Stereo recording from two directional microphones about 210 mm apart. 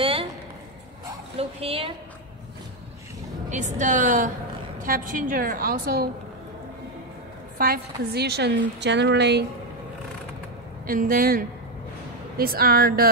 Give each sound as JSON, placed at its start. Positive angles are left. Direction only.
{"t": 0.0, "sound": "a sound", "side_deg": -25}
{"t": 1.4, "sound": "a woman's voice", "side_deg": -25}
{"t": 3.4, "sound": "a woman's voice", "side_deg": -35}
{"t": 7.5, "sound": "a woman's voice", "side_deg": -45}
{"t": 10.9, "sound": "a woman's voice", "side_deg": -40}